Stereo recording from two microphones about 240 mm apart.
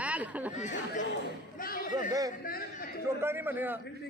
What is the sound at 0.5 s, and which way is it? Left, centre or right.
Speech, left.